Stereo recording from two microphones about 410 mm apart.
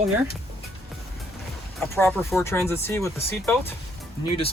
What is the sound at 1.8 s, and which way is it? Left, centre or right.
Speech, centre.